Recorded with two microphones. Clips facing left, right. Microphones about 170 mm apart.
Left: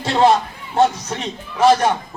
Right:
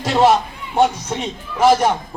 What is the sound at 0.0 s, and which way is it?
Speech, 5° right (ahead or behind).